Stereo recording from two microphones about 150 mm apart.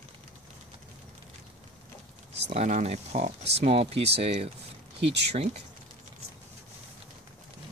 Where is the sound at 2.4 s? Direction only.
45° right (ahead or behind).